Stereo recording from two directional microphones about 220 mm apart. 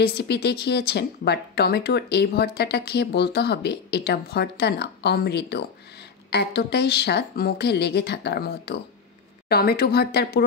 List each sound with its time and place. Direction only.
0.0 s speech: 45° left (ahead or behind)